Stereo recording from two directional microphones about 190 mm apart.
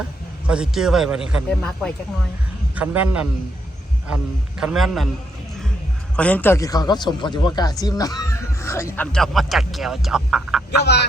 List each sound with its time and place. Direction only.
0.4 s speech: 5° right (ahead or behind)
2.7 s a man's voice: 10° right (ahead or behind)
4.6 s speech: centre (ahead or behind)
6.1 s speech: 5° left (ahead or behind)
9.1 s speech: centre (ahead or behind)